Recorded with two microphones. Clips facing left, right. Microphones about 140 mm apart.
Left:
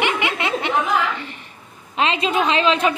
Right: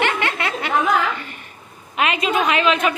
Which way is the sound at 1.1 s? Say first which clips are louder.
Left 1 dB; 25° left (ahead or behind).